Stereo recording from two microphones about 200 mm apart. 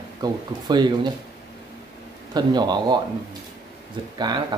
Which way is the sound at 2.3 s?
20° right (ahead or behind).